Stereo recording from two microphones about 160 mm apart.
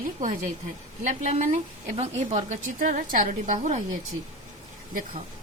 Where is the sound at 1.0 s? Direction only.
50° right (ahead or behind).